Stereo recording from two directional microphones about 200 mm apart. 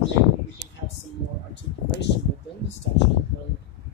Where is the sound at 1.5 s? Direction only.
60° left (ahead or behind).